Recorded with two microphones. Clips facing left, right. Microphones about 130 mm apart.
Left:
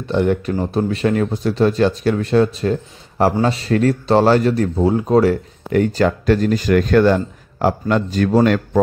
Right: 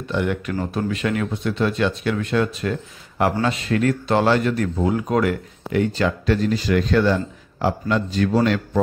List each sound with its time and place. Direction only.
0.1 s speech: 35° left (ahead or behind)
5.9 s speech: 45° left (ahead or behind)